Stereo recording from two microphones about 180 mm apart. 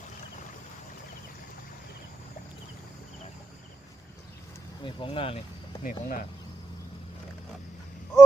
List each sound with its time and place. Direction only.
4.8 s speech: 30° left (ahead or behind)
5.8 s speech: 55° left (ahead or behind)